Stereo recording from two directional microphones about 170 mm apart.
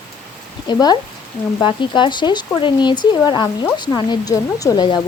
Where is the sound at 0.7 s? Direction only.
25° left (ahead or behind).